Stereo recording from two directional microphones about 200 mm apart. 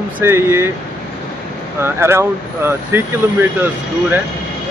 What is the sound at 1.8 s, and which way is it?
Speech, 15° right (ahead or behind).